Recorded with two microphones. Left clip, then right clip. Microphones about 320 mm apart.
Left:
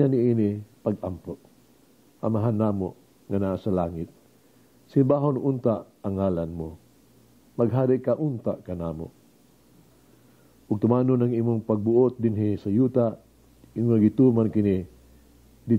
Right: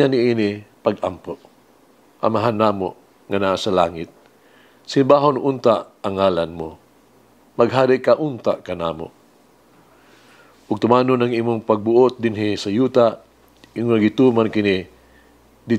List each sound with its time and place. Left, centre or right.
0.0 s speech: centre
1.1 s speech: centre
2.1 s speech: centre
8.2 s speech: right
8.5 s speech: centre
10.8 s speech: centre